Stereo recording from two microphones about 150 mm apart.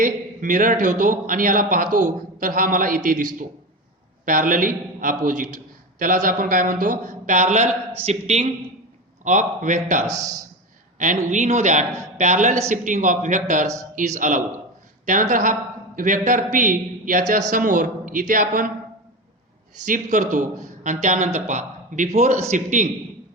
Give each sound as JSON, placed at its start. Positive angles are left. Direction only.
{"t": 0.0, "sound": "a man's voice", "side_deg": -60}
{"t": 10.1, "sound": "a man's voice", "side_deg": -25}
{"t": 11.3, "sound": "a woman's voice", "side_deg": -50}
{"t": 19.8, "sound": "a man's voice", "side_deg": -55}